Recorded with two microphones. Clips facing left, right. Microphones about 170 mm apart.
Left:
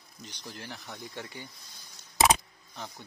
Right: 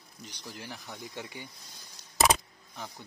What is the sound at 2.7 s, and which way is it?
Speech, centre (ahead or behind).